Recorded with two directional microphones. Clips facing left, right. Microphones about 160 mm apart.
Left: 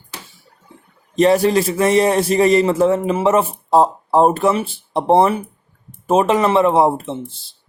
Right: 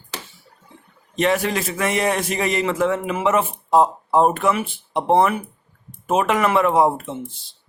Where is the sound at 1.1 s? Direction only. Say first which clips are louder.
Left 7 dB; 35° left (ahead or behind).